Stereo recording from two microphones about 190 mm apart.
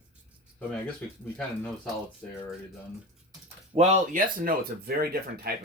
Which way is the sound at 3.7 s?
35° right (ahead or behind).